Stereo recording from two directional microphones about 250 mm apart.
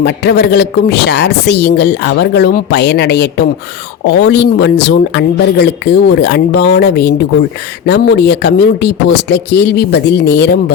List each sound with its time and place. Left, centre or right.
0.0 s speech: left